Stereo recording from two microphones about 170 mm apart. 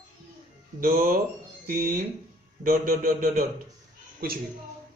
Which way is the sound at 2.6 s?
55° right (ahead or behind).